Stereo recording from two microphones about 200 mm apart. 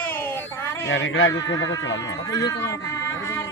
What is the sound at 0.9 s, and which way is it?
Speech, 75° left (ahead or behind).